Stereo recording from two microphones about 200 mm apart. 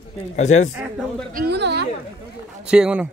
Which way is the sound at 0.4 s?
35° left (ahead or behind).